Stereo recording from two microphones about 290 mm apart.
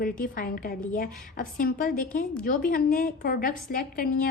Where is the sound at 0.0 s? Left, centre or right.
Left.